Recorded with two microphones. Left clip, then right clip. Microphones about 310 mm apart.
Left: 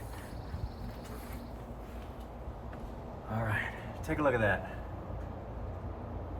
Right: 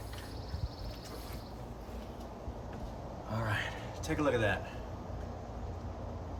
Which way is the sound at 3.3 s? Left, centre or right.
Centre.